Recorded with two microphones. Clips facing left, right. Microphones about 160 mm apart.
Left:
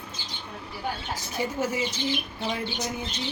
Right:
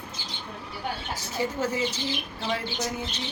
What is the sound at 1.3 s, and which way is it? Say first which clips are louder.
Speech: even; 10° left (ahead or behind).